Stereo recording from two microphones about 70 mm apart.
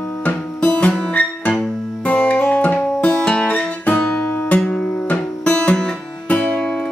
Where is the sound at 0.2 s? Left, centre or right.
Left.